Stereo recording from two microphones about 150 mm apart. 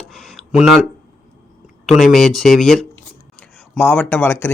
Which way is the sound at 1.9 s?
Centre (ahead or behind).